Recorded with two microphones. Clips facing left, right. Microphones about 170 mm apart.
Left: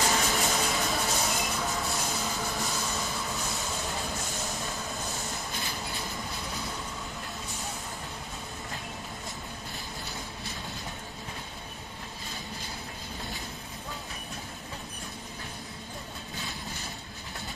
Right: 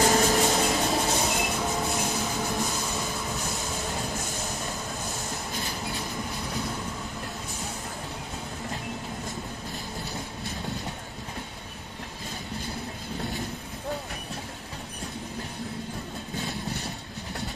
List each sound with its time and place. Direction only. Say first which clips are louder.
0.0 s a sound: right 6 dB; 40° right (ahead or behind)
0.8 s train: right 4 dB; 20° right (ahead or behind)
4.5 s train: right 2 dB; centre (ahead or behind)